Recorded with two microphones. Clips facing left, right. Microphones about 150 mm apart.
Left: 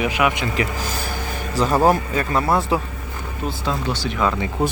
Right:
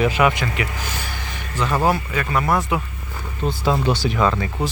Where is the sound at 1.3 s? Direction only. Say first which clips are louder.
Left 3 dB; 35° left (ahead or behind).